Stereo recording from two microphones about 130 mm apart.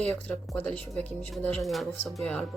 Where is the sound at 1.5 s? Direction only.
Centre (ahead or behind).